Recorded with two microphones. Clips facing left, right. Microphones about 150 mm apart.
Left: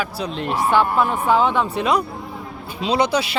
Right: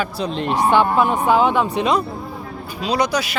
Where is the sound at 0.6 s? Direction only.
25° right (ahead or behind).